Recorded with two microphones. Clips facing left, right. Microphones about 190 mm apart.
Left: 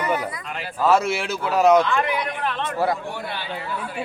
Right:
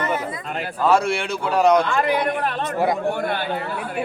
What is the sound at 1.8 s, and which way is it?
Speech, 35° right (ahead or behind).